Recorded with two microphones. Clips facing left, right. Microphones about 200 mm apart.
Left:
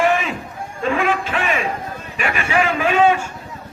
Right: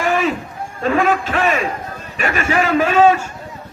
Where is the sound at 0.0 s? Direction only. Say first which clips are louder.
Right 1 dB; 40° right (ahead or behind).